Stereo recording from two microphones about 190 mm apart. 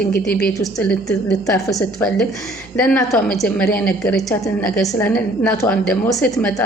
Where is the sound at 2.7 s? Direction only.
5° left (ahead or behind).